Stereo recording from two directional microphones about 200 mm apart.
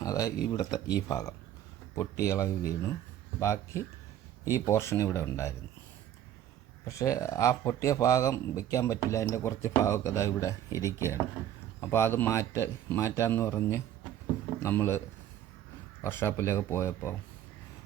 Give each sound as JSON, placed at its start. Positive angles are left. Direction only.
{"t": 0.0, "sound": "a sound", "side_deg": 15}
{"t": 0.5, "sound": "speech", "side_deg": 20}
{"t": 6.8, "sound": "speech", "side_deg": 15}